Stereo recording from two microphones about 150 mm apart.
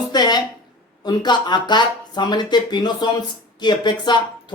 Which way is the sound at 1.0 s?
30° left (ahead or behind).